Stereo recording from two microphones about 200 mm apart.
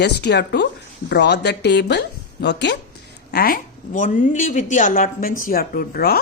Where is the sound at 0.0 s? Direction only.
55° left (ahead or behind).